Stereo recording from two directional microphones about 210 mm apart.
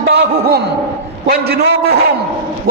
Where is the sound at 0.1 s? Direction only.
50° right (ahead or behind).